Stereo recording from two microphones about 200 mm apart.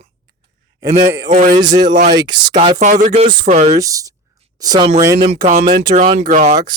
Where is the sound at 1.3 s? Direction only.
40° right (ahead or behind).